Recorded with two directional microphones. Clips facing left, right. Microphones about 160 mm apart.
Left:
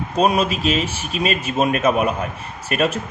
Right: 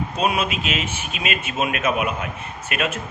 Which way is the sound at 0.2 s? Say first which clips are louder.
Left 6 dB; 35° left (ahead or behind).